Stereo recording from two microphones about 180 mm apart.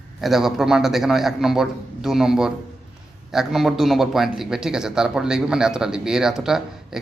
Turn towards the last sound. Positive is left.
turn(degrees=-5)  # may be behind; listen again after turning